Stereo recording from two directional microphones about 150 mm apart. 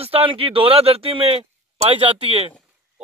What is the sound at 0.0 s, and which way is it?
Speech, 40° right (ahead or behind).